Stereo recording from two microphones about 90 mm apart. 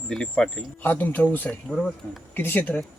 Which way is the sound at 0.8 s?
20° left (ahead or behind).